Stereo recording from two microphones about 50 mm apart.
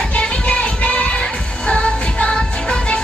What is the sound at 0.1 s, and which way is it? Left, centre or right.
Music, left.